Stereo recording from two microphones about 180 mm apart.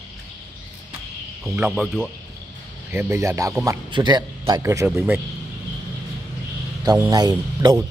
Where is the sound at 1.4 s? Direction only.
5° right (ahead or behind).